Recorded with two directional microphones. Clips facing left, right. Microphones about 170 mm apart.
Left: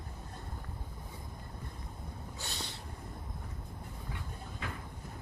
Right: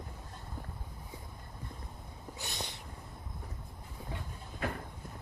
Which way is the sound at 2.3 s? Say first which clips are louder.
Right 3 dB; 15° right (ahead or behind).